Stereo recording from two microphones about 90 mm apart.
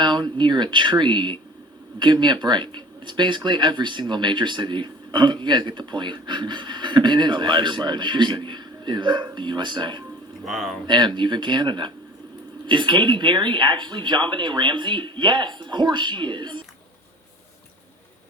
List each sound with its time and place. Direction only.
0.0 s speech: 55° right (ahead or behind)
10.4 s speech: centre (ahead or behind)
10.8 s speech: 55° right (ahead or behind)